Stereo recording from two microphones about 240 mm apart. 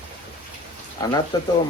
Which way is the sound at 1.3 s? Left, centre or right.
Centre.